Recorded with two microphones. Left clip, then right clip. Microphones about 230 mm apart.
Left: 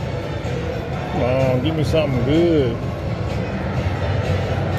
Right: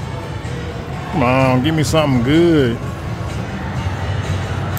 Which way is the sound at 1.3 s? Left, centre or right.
Right.